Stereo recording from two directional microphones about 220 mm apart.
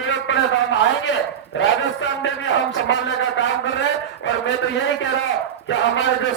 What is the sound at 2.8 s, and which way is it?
Speech, 55° left (ahead or behind).